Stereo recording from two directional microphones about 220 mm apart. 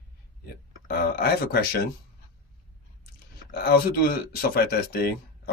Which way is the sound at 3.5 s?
45° left (ahead or behind).